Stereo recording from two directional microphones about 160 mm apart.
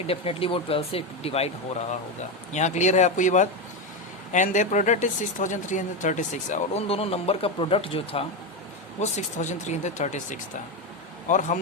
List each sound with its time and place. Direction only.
0.1 s speech: 35° left (ahead or behind)
2.5 s speech: 45° left (ahead or behind)